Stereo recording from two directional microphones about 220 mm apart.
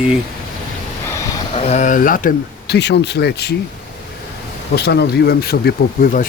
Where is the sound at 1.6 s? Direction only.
30° left (ahead or behind); by 3.5 s 50° left (ahead or behind).